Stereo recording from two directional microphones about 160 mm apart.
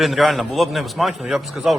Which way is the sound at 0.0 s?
Centre (ahead or behind).